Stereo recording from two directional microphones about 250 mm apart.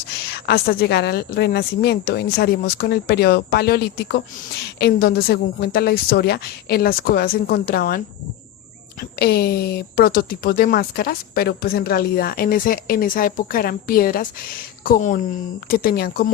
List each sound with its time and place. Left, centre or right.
0.3 s speech: left